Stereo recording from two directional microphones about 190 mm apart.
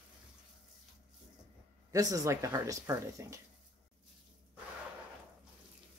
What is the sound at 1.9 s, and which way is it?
Speech, 20° right (ahead or behind).